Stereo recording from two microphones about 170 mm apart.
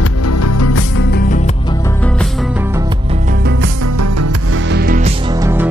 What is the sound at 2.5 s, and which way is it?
Music, 15° right (ahead or behind).